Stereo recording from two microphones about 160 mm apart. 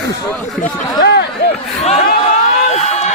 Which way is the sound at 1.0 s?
90° left.